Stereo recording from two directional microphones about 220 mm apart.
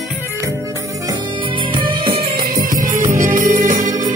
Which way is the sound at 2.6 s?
40° right (ahead or behind).